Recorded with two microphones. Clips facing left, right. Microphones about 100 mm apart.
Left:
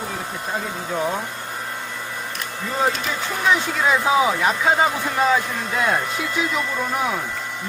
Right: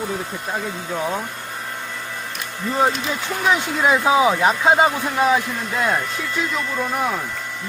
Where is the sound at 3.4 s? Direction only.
20° right (ahead or behind).